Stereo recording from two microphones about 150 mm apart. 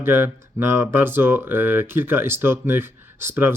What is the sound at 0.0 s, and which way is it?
Speech, 15° right (ahead or behind).